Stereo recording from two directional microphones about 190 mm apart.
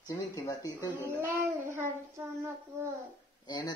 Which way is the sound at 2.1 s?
15° right (ahead or behind).